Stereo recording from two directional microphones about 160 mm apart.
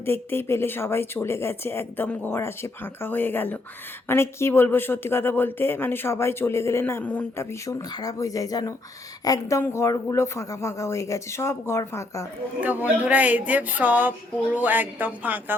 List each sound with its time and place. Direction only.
0.0 s speech: 15° left (ahead or behind)
12.6 s speech: 10° right (ahead or behind)